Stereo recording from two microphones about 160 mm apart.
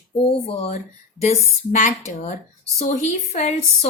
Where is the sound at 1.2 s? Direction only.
45° left (ahead or behind).